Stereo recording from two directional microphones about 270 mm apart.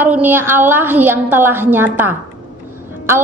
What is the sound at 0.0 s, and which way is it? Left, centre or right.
A woman's voice, centre.